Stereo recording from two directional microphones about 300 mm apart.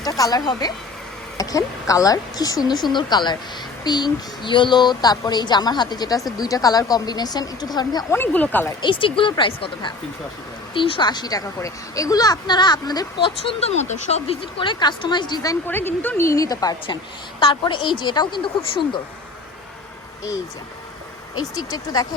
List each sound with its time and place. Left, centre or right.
0.0 s speech: centre
21.5 s speech: centre